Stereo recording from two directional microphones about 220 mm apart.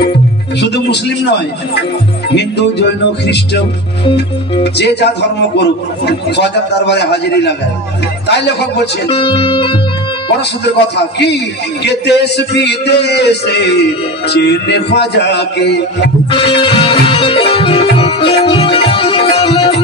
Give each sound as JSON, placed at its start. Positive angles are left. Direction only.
{"t": 0.6, "sound": "speech", "side_deg": 50}
{"t": 4.7, "sound": "speech", "side_deg": 50}
{"t": 9.1, "sound": "speech", "side_deg": 25}
{"t": 11.0, "sound": "speech", "side_deg": 50}
{"t": 16.3, "sound": "music", "side_deg": 25}